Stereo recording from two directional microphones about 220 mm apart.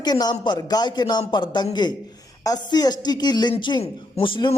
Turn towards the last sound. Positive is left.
turn(degrees=20)  # may be behind; listen again after turning